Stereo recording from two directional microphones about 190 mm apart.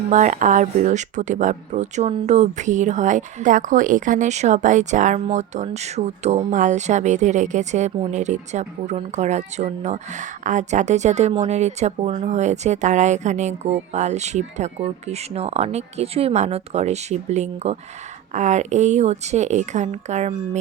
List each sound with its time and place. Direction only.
0.1 s speech: 40° right (ahead or behind)